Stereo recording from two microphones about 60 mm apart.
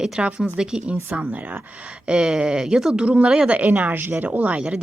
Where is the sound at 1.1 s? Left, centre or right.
Right.